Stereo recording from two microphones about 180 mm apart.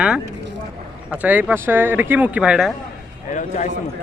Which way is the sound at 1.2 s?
10° right (ahead or behind).